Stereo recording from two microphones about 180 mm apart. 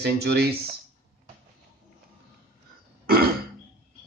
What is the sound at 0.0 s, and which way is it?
Speech, 65° right (ahead or behind).